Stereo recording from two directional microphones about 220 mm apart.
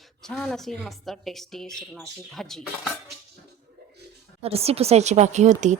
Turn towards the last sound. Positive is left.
turn(degrees=-30)  # may be behind; listen again after turning